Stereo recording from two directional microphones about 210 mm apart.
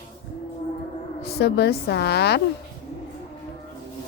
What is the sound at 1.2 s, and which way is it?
Speech, 50° left (ahead or behind).